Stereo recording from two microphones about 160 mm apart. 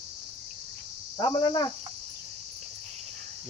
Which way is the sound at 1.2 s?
30° left (ahead or behind).